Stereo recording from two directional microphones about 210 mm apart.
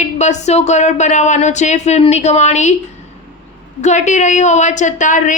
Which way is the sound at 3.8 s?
35° left (ahead or behind).